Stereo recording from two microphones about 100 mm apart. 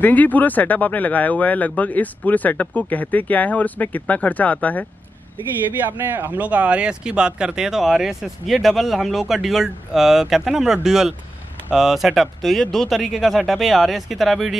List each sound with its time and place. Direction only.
0.0 s speech: 15° left (ahead or behind)
5.9 s speech: 20° right (ahead or behind); by 14.5 s centre (ahead or behind)